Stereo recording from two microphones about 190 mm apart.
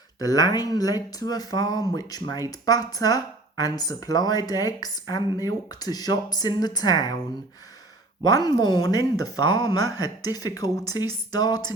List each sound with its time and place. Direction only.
0.2 s speech: 20° left (ahead or behind)
8.2 s speech: 20° left (ahead or behind)